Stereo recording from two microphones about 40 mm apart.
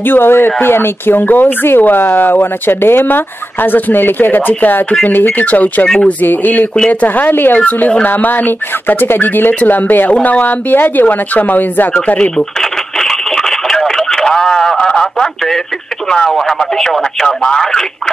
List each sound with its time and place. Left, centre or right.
0.0 s speech: left
3.6 s speech: left
5.4 s speech: left
13.0 s a sound: centre
16.3 s speech: centre